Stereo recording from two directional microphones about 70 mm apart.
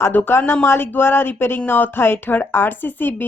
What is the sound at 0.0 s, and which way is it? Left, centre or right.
Speech, left.